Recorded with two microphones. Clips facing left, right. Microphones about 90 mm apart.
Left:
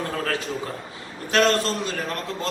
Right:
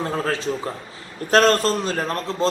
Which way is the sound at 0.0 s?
25° right (ahead or behind).